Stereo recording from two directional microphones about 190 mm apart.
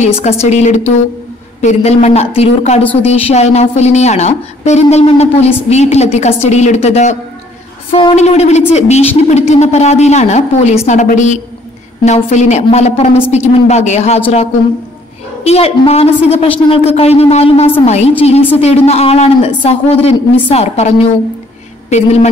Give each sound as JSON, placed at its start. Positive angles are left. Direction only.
{"t": 0.0, "sound": "speech", "side_deg": 35}
{"t": 15.4, "sound": "speech", "side_deg": 30}